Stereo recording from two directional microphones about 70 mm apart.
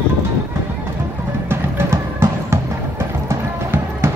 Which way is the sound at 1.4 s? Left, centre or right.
Right.